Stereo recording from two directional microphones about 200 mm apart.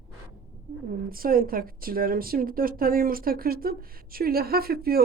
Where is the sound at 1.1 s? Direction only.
45° right (ahead or behind).